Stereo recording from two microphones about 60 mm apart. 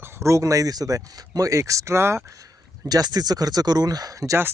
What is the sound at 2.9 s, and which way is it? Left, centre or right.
Speech, right.